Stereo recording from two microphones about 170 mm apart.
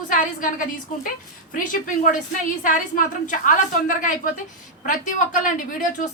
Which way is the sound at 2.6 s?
50° left (ahead or behind).